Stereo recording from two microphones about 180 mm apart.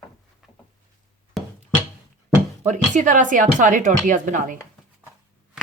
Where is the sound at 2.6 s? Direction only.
45° right (ahead or behind).